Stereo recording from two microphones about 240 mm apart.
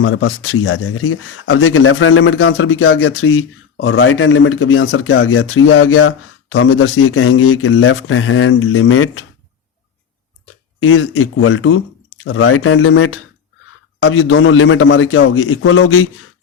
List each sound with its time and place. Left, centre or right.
0.0 s speech: left
10.8 s speech: left